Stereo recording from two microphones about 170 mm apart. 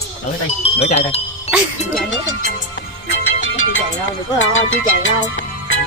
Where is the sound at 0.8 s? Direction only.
40° left (ahead or behind).